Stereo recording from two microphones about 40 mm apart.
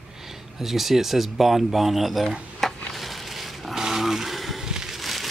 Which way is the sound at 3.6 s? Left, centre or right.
Centre.